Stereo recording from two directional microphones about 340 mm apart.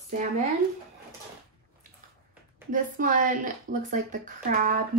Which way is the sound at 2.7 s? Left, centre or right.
Right.